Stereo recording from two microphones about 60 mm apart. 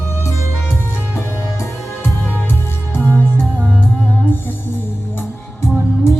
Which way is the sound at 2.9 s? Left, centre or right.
Left.